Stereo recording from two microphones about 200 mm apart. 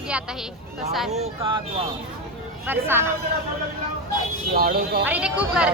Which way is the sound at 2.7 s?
10° right (ahead or behind).